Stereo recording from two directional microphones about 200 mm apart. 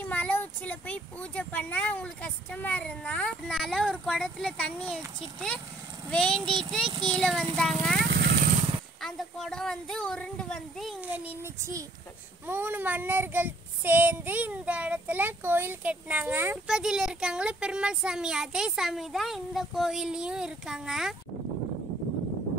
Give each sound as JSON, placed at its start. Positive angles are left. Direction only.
{"t": 0.0, "sound": "child singing", "side_deg": 5}
{"t": 8.0, "sound": "vehicle", "side_deg": -55}
{"t": 9.0, "sound": "child singing", "side_deg": 0}